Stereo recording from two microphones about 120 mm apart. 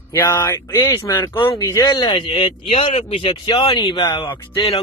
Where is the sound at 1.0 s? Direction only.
30° left (ahead or behind); by 3.2 s 50° left (ahead or behind).